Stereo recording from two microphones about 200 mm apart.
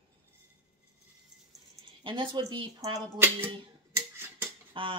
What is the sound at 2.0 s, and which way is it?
Speech, 25° right (ahead or behind).